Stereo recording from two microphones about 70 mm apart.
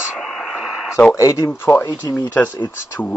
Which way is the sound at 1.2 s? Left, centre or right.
Left.